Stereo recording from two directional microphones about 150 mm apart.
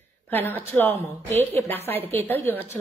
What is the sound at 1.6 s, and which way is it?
Speech, 45° right (ahead or behind).